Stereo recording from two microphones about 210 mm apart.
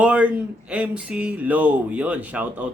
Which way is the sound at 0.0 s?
5° right (ahead or behind).